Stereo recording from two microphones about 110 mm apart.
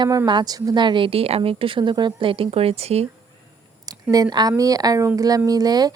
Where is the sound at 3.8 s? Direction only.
35° right (ahead or behind).